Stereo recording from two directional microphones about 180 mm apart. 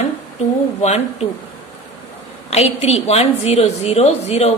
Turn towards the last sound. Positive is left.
turn(degrees=35)  # may be behind; listen again after turning